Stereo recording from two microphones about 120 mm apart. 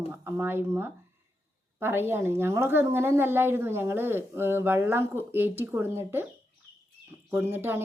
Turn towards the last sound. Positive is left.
turn(degrees=-20)  # may be behind; listen again after turning